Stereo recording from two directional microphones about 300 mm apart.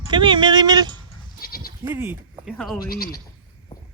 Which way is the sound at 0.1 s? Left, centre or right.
Centre.